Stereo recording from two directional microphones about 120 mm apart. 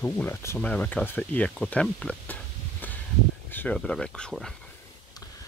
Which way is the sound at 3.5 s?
15° left (ahead or behind).